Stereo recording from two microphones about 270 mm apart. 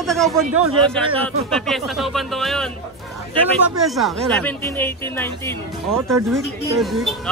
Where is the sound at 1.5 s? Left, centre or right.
Centre.